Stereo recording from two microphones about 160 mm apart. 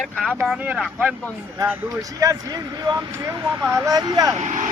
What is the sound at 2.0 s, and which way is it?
Speech, 20° right (ahead or behind).